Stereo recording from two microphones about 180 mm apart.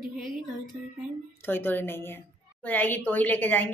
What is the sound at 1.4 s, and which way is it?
A woman's voice, 10° left (ahead or behind).